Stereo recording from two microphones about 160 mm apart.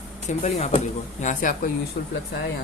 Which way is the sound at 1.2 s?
55° left (ahead or behind).